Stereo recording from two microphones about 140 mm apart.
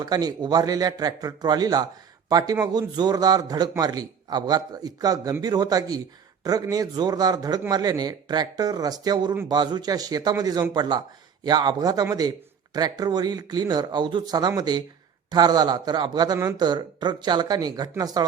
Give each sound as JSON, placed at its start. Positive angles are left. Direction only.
{"t": 0.0, "sound": "a man's voice", "side_deg": -30}